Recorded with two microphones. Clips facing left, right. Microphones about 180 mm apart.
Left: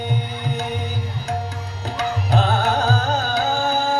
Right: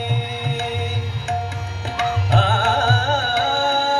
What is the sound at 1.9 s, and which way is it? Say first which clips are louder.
Music: right 1 dB; 40° left (ahead or behind).